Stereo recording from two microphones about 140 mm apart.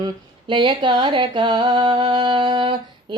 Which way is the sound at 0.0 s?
35° right (ahead or behind).